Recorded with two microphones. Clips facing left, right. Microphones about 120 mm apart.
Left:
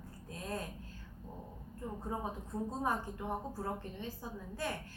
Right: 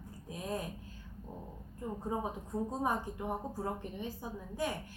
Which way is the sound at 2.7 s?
15° right (ahead or behind).